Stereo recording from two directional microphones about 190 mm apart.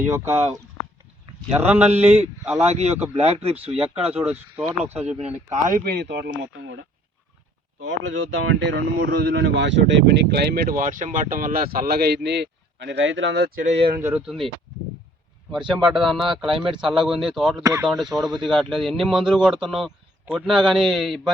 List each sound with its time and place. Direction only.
0.1 s speech: 10° right (ahead or behind)
1.9 s speech: 35° right (ahead or behind)
2.4 s speech: 10° right (ahead or behind)
2.7 s speech: 35° right (ahead or behind)
4.1 s speech: 10° right (ahead or behind)
5.1 s speech: 35° right (ahead or behind); by 6.7 s 70° right (ahead or behind)
7.8 s speech: 90° right; by 13.7 s 60° right (ahead or behind)
13.7 s speech: 30° right (ahead or behind)
14.0 s a man's voice: 10° right (ahead or behind)
15.7 s a man's voice: centre (ahead or behind)
17.6 s speech: 15° right (ahead or behind)
17.8 s a man's voice: centre (ahead or behind)